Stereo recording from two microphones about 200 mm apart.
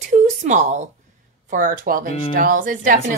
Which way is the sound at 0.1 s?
35° right (ahead or behind).